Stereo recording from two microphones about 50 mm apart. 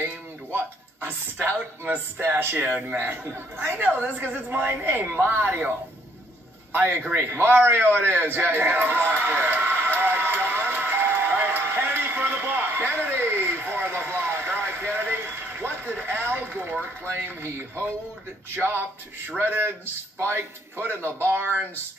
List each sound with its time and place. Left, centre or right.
0.0 s a sound: right
1.9 s a woman's voice: right
4.8 s speech: right
5.1 s a woman's voice: right
6.7 s a man's voice: right
7.2 s speech: right
7.6 s a sound: right
19.3 s speech: right